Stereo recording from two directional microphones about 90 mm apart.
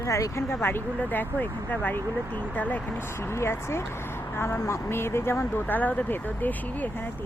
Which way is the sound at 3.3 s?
30° left (ahead or behind).